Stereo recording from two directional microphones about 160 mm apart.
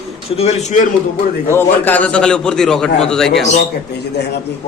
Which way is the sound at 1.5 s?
15° left (ahead or behind).